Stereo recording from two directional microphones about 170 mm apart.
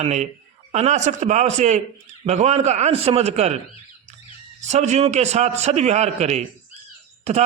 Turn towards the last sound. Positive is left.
turn(degrees=-40)  # may be behind; listen again after turning